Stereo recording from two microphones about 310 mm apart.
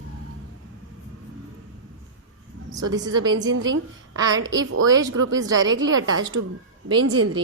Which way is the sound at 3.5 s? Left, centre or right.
Right.